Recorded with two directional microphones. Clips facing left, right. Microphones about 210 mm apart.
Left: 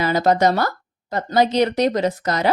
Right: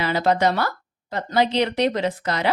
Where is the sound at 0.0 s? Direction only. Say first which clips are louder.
Left 3 dB; 45° left (ahead or behind).